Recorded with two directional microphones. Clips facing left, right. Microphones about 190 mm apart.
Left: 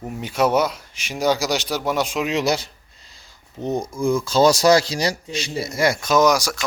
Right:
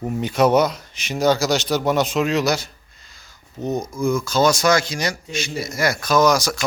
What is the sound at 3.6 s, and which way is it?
Speech, 30° left (ahead or behind).